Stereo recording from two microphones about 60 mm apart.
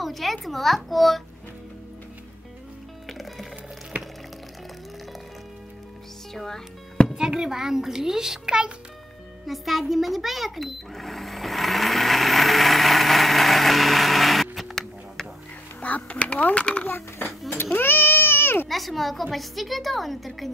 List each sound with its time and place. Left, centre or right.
0.0 s a woman's voice: centre
3.1 s music: centre
6.3 s a woman's voice: centre
7.2 s a child's voice: centre
9.5 s cash register: centre
15.8 s a child's voice: left
16.8 s a child's voice: left
17.7 s baby cry: left
18.7 s a woman's voice: centre